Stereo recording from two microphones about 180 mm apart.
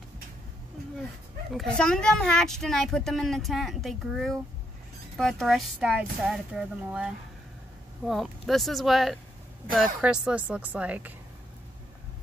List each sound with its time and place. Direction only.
1.5 s speech: 5° left (ahead or behind)